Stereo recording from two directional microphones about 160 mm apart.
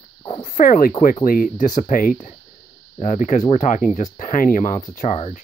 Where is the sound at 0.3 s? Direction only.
55° left (ahead or behind).